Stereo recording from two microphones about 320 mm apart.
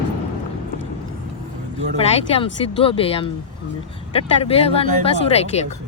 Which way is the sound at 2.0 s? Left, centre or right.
Centre.